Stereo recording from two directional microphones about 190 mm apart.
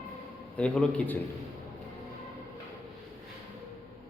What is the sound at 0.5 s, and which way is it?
Speech, 5° left (ahead or behind).